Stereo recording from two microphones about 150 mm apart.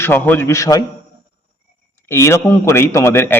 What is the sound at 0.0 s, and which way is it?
Speech, 15° left (ahead or behind).